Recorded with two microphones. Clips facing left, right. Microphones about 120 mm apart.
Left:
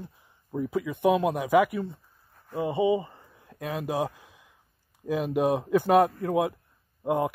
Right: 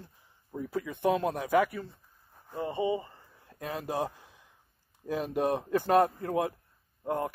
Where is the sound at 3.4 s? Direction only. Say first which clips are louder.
Left 4 dB; 5° left (ahead or behind).